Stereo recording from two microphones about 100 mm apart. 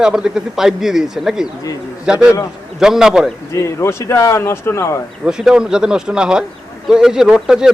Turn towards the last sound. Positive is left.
turn(degrees=-5)  # may be behind; listen again after turning